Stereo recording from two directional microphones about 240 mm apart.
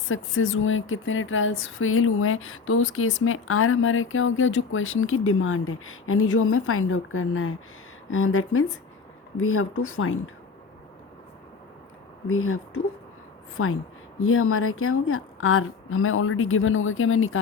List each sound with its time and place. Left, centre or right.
0.1 s speech: left
12.3 s speech: left